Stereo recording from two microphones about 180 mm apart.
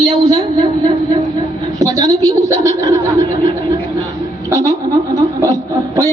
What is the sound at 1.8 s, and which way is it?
A man's voice, 20° right (ahead or behind).